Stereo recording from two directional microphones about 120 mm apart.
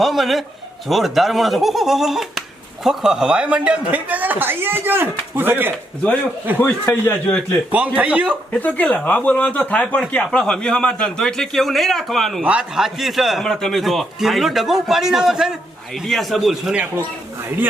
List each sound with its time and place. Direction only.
0.0 s a man's voice: centre (ahead or behind)
6.8 s speech: 15° left (ahead or behind)
7.9 s speech: 10° right (ahead or behind)
8.5 s a man's voice: 15° left (ahead or behind)
12.4 s a man's voice: 10° right (ahead or behind)